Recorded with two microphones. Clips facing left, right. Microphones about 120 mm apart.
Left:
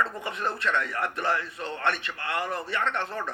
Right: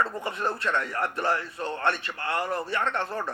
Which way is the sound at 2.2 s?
50° right (ahead or behind).